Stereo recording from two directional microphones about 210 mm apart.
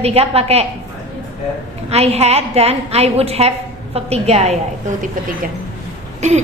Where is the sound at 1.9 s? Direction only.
30° right (ahead or behind).